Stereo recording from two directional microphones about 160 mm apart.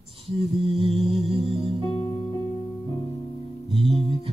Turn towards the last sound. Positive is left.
turn(degrees=-35)  # may be behind; listen again after turning